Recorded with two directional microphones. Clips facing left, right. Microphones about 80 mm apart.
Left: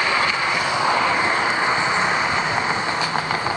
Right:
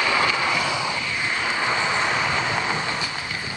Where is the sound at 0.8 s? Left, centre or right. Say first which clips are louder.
Left 9 dB; left.